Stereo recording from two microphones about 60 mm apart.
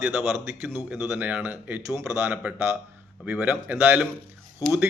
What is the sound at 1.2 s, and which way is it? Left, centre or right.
A man's voice, right.